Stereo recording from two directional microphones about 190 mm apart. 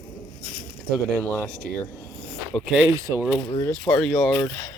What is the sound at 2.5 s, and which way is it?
Speech, 5° left (ahead or behind).